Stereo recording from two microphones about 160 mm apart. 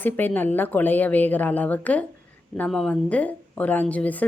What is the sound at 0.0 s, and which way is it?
A woman's voice, 10° left (ahead or behind).